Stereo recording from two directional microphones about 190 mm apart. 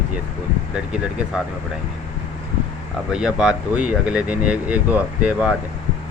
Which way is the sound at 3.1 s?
5° right (ahead or behind).